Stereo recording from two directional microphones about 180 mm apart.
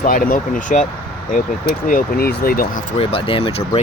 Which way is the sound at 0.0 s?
50° left (ahead or behind).